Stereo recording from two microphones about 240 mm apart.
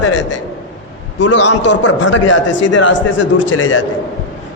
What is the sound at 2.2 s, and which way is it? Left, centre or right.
A man's voice, left.